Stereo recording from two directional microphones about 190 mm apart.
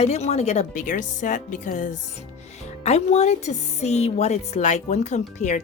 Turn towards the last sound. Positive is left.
turn(degrees=40)  # may be behind; listen again after turning